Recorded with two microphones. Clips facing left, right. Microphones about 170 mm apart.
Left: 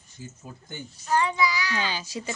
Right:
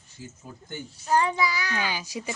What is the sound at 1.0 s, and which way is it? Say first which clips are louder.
Speech: even; 40° right (ahead or behind).